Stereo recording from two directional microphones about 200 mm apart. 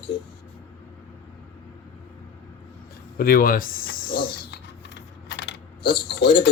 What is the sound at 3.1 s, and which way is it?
Speech, 45° left (ahead or behind).